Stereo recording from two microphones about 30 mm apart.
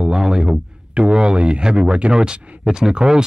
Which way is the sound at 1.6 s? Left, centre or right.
Right.